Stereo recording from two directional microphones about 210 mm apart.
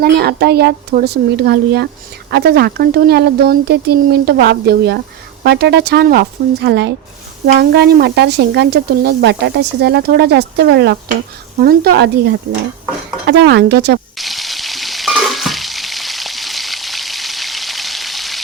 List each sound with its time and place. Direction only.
0.0 s speech: 50° right (ahead or behind)
14.2 s frying: centre (ahead or behind)